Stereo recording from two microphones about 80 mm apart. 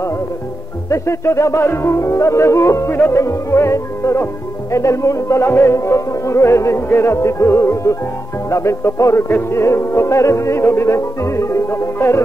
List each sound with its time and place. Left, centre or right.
0.8 s music: left